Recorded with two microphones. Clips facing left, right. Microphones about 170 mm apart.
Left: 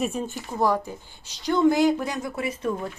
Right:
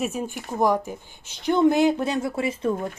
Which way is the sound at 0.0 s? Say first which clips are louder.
Even; 5° right (ahead or behind).